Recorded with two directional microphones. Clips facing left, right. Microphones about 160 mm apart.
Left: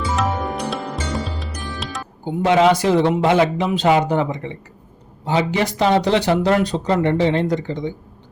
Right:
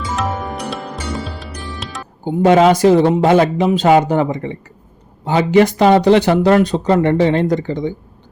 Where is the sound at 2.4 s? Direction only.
45° right (ahead or behind).